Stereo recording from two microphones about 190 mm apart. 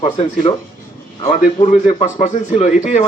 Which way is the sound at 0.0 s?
30° left (ahead or behind).